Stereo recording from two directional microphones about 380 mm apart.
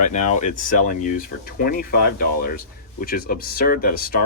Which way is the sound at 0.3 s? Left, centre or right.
Centre.